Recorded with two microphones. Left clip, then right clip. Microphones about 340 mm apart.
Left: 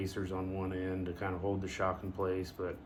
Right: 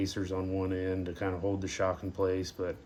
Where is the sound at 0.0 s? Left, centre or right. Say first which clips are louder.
Right 4 dB; right.